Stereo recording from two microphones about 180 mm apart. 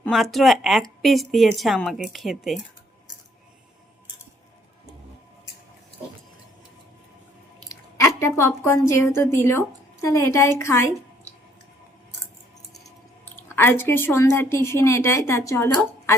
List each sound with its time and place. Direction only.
0.1 s a woman's voice: centre (ahead or behind)
7.7 s a woman's voice: 15° left (ahead or behind)
13.3 s speech: 10° left (ahead or behind)